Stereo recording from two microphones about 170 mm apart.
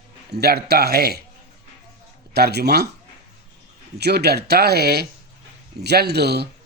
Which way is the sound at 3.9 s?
75° right (ahead or behind).